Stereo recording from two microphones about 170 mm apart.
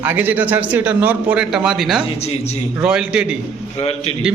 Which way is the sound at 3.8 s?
40° left (ahead or behind).